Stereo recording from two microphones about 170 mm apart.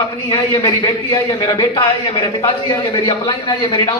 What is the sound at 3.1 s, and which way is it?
Speech, 25° left (ahead or behind).